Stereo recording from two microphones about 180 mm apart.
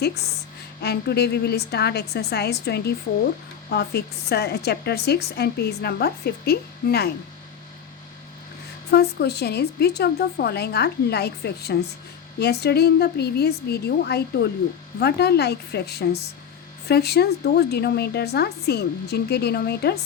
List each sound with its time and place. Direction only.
0.8 s a woman's voice: 65° left (ahead or behind)
8.9 s a woman's voice: 65° left (ahead or behind)